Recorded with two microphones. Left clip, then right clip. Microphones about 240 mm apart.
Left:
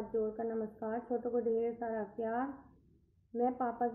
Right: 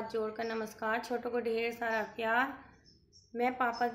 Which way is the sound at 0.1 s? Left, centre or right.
Right.